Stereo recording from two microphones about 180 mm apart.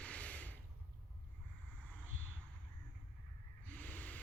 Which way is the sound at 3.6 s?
10° left (ahead or behind).